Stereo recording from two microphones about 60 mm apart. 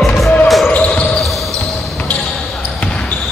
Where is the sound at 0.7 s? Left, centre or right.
Left.